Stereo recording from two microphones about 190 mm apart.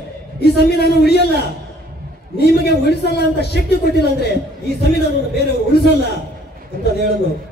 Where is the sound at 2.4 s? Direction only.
60° left (ahead or behind).